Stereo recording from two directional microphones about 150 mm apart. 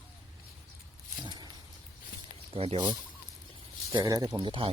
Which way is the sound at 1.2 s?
30° right (ahead or behind).